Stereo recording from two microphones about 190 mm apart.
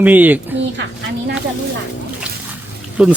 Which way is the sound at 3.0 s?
5° right (ahead or behind).